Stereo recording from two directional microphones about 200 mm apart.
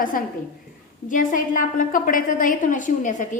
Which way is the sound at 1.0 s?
40° left (ahead or behind).